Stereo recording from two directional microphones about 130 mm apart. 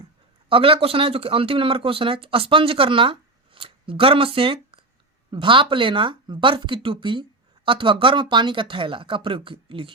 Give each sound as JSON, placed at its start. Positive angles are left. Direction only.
{"t": 0.4, "sound": "speech", "side_deg": -45}